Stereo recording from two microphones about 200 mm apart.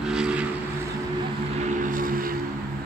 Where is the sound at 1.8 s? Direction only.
45° right (ahead or behind).